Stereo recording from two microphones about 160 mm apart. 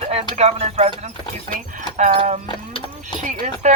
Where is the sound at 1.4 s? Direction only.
50° right (ahead or behind).